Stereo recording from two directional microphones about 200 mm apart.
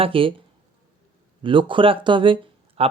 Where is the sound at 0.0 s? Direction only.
25° right (ahead or behind).